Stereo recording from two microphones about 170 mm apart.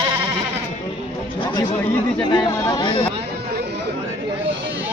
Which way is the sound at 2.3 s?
25° left (ahead or behind).